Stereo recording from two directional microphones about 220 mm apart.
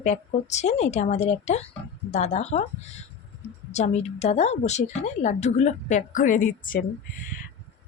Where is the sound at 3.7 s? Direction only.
30° left (ahead or behind).